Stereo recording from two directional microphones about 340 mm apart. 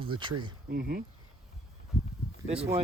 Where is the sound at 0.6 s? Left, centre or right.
Right.